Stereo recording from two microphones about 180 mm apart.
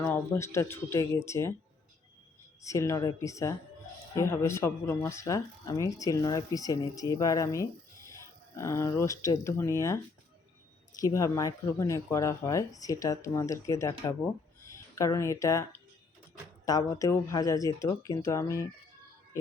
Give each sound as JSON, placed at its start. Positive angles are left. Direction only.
{"t": 0.0, "sound": "speech", "side_deg": 15}
{"t": 2.6, "sound": "speech", "side_deg": 15}
{"t": 11.0, "sound": "speech", "side_deg": 20}
{"t": 16.6, "sound": "speech", "side_deg": 20}